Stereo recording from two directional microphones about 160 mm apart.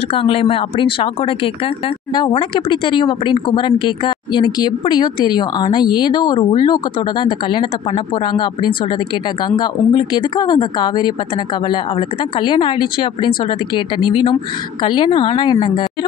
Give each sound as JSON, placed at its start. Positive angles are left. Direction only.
{"t": 0.1, "sound": "a woman's voice", "side_deg": 35}
{"t": 12.4, "sound": "a woman's voice", "side_deg": 30}